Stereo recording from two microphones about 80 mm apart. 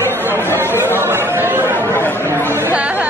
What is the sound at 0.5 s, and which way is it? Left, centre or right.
Chatter, right.